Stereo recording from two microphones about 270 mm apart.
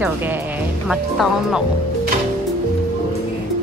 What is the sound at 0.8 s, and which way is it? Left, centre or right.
Speech, centre.